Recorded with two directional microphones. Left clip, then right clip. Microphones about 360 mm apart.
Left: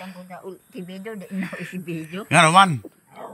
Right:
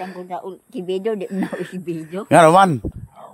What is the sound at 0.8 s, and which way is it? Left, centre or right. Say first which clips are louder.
Speech: right 14 dB; right.